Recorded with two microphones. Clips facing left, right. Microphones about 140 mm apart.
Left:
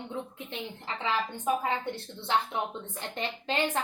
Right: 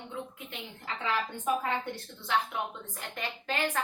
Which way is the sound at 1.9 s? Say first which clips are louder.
Left 2 dB; 30° left (ahead or behind).